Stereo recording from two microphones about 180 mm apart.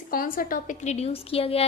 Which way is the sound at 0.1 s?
50° left (ahead or behind).